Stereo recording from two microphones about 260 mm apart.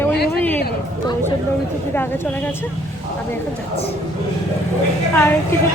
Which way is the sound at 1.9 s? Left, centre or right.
Centre.